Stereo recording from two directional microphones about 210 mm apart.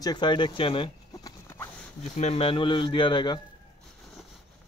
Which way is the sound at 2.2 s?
30° left (ahead or behind).